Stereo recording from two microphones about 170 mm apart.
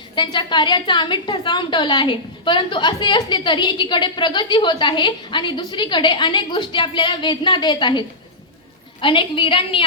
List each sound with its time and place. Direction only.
0.2 s a woman's voice: 30° left (ahead or behind)